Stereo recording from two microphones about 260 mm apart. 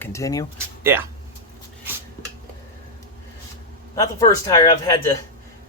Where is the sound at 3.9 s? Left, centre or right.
Centre.